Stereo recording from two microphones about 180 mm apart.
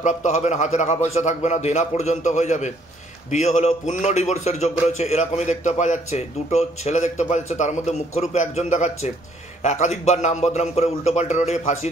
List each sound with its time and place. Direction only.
0.0 s a man's voice: 40° left (ahead or behind)